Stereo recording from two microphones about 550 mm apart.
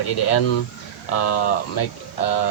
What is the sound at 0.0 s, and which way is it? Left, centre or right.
Speech, left.